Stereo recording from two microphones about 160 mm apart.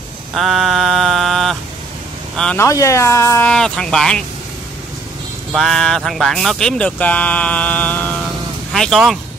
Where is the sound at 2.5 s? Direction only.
20° left (ahead or behind).